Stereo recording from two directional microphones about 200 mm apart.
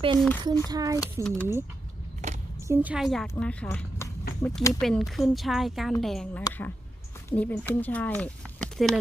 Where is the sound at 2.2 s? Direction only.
35° right (ahead or behind).